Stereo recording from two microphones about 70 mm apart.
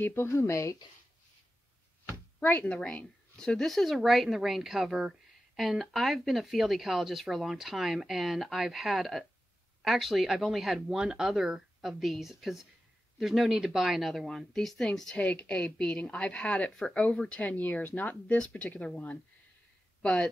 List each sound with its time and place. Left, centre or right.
0.0 s speech: left
2.4 s a woman's voice: centre